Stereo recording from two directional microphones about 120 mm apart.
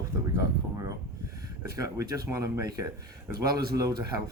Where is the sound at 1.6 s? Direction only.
25° right (ahead or behind).